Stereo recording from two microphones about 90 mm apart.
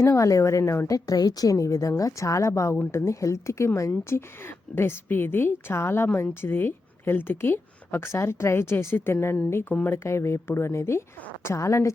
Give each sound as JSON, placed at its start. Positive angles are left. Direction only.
{"t": 0.0, "sound": "a woman's voice", "side_deg": 35}